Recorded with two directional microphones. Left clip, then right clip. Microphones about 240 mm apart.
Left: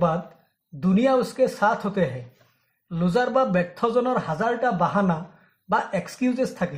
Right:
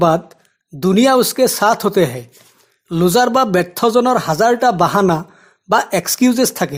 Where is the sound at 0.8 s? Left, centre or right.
Right.